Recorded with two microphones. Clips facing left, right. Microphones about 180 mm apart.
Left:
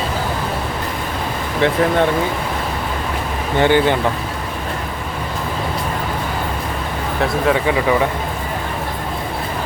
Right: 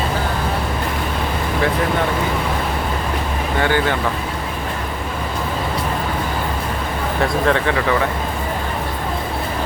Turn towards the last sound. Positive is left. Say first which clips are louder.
# left 2 dB
turn(degrees=15)  # may be behind; listen again after turning